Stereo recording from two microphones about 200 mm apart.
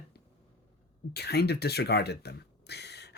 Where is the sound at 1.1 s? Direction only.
55° left (ahead or behind).